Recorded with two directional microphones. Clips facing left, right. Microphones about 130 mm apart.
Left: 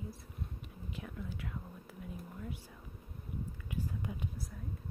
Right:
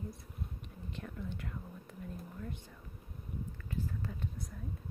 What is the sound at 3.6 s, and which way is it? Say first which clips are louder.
Whispering: even; 15° left (ahead or behind).